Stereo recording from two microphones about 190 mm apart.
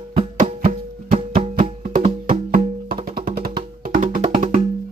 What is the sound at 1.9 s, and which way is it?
Music, 25° right (ahead or behind).